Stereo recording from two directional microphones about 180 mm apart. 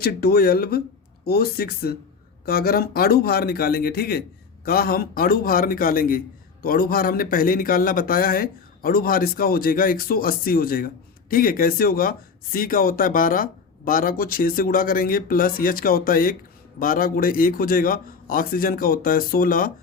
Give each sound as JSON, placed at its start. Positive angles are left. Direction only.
{"t": 0.0, "sound": "a man's voice", "side_deg": 60}